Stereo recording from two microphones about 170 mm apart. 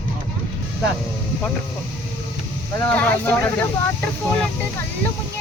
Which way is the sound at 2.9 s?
10° left (ahead or behind).